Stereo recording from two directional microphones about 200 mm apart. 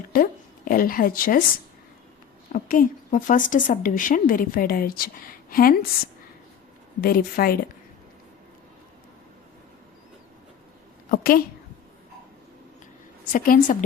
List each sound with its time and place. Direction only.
0.1 s a woman's voice: 45° left (ahead or behind)
2.5 s a woman's voice: 40° left (ahead or behind)
7.0 s a woman's voice: 45° left (ahead or behind)
11.1 s a woman's voice: 45° left (ahead or behind)
13.3 s a woman's voice: 45° left (ahead or behind)